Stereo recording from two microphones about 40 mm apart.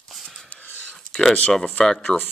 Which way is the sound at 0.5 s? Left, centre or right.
Left.